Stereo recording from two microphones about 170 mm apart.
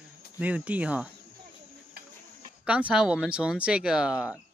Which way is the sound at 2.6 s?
5° right (ahead or behind).